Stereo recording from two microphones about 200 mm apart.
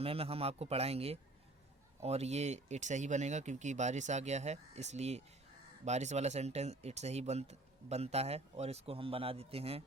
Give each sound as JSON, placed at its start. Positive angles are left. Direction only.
{"t": 0.0, "sound": "speech", "side_deg": -30}